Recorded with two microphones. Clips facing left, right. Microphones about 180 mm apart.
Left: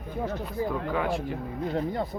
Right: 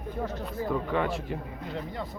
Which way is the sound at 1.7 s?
45° left (ahead or behind).